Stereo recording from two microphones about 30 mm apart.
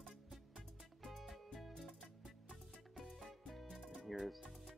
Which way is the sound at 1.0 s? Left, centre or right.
Centre.